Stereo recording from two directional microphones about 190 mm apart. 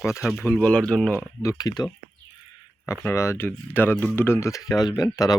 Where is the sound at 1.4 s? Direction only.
20° left (ahead or behind).